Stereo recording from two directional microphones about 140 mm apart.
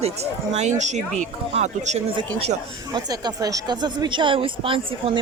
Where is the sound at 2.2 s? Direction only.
45° right (ahead or behind).